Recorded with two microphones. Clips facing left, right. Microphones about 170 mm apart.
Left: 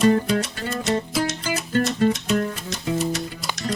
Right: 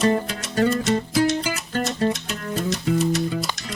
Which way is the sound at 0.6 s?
40° right (ahead or behind).